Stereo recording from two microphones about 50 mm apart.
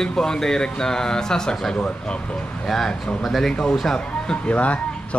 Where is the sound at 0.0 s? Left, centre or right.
Centre.